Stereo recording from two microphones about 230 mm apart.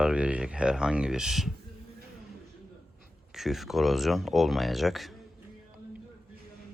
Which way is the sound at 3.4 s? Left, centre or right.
Centre.